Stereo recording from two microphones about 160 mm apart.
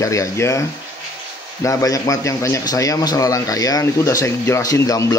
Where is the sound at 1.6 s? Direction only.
20° left (ahead or behind).